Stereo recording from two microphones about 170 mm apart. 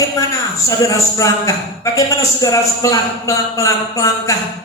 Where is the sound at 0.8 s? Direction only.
20° left (ahead or behind).